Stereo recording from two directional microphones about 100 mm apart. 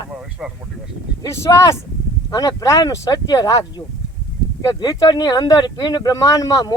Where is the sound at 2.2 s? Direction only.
40° left (ahead or behind).